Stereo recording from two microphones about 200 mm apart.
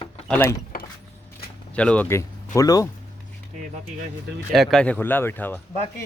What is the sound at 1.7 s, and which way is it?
Speech, 5° left (ahead or behind).